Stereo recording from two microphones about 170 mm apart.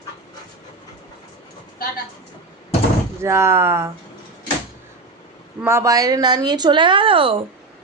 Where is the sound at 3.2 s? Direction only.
15° right (ahead or behind).